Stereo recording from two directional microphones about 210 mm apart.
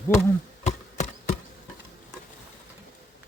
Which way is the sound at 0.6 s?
30° left (ahead or behind).